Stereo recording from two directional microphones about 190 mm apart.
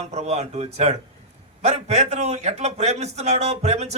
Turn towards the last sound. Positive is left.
turn(degrees=-35)  # may be behind; listen again after turning